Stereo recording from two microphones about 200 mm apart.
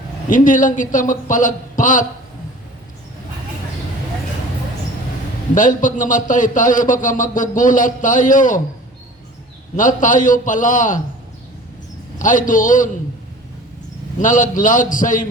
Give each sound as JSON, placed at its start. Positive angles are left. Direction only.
{"t": 0.3, "sound": "a man's voice", "side_deg": 40}
{"t": 5.5, "sound": "a man's voice", "side_deg": 40}
{"t": 9.7, "sound": "a man's voice", "side_deg": 40}
{"t": 12.2, "sound": "a man's voice", "side_deg": 40}
{"t": 14.2, "sound": "a man's voice", "side_deg": 40}